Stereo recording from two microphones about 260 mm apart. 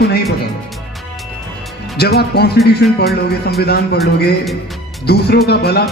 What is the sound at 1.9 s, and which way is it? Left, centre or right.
Speech, left.